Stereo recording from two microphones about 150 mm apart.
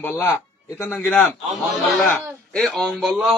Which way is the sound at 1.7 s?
Centre (ahead or behind).